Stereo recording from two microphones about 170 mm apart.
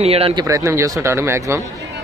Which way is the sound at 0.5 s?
20° right (ahead or behind).